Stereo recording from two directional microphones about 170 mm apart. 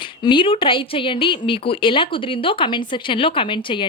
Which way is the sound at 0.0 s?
30° left (ahead or behind).